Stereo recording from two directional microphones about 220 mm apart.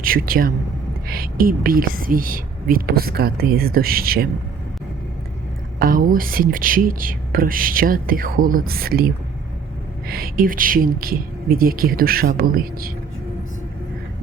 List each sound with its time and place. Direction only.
0.0 s speech: 40° right (ahead or behind)
5.8 s speech: 40° right (ahead or behind)